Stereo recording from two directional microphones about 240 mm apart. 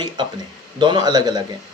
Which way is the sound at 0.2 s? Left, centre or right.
Centre.